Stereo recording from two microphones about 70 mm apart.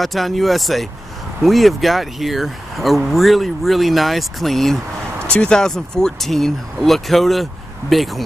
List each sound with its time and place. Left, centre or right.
0.0 s speech: centre
5.3 s speech: centre